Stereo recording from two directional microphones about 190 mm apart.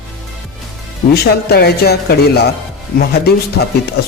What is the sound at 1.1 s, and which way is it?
A man's voice, 55° left (ahead or behind).